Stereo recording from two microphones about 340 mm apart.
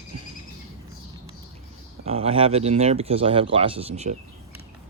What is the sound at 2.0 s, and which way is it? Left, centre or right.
Speech, centre.